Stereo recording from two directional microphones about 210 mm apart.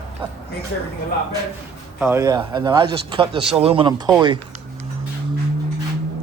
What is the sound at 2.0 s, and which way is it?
A man's voice, 10° right (ahead or behind).